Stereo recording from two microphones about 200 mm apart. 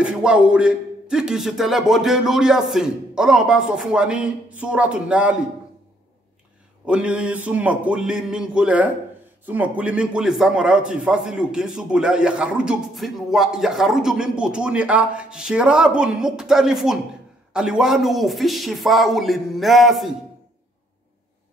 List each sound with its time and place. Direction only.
0.0 s a man's voice: 5° right (ahead or behind)
6.9 s a man's voice: 5° right (ahead or behind)